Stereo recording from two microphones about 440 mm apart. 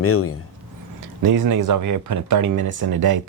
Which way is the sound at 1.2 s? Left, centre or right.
Right.